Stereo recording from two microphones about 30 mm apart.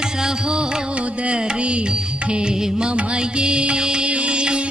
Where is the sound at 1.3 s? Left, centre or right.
Right.